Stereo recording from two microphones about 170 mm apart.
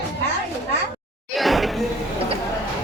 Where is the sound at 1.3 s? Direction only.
Centre (ahead or behind).